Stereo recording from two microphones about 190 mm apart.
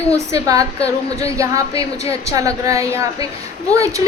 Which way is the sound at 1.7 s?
30° left (ahead or behind).